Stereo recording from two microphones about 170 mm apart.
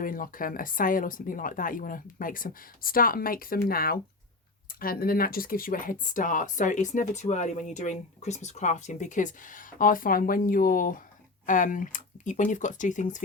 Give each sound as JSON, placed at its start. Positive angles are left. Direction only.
{"t": 0.0, "sound": "speech", "side_deg": 55}